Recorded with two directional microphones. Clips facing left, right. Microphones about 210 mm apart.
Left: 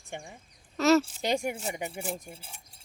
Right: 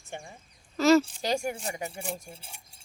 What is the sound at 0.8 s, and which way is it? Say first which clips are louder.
Speech: right 2 dB; centre (ahead or behind).